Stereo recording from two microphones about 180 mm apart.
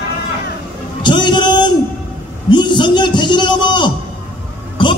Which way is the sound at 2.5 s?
25° left (ahead or behind).